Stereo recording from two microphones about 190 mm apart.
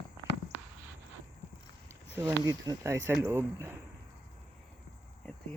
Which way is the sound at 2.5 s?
15° right (ahead or behind).